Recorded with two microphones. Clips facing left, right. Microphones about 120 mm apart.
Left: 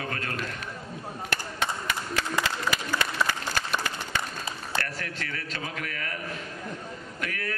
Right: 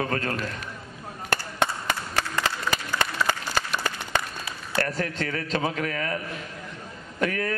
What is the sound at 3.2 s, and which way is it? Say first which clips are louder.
Applause: right 2 dB; 15° left (ahead or behind).